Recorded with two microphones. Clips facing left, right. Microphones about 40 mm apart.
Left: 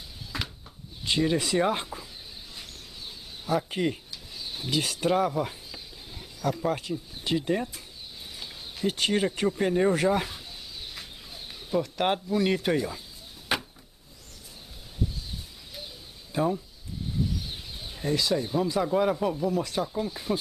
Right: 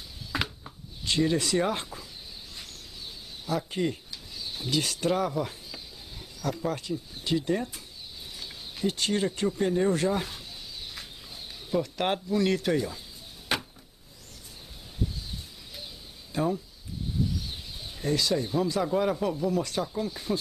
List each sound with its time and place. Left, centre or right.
0.3 s a sound: centre
1.0 s speech: centre
3.4 s speech: centre
5.7 s a sound: centre
8.9 s speech: centre
11.0 s speech: centre
13.5 s chop: centre
16.3 s speech: centre
17.9 s speech: centre